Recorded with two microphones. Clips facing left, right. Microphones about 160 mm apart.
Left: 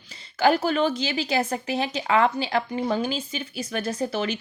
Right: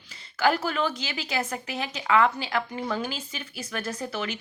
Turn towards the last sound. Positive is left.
turn(degrees=30)  # may be behind; listen again after turning